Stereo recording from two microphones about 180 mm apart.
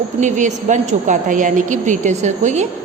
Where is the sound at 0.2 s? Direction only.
40° right (ahead or behind).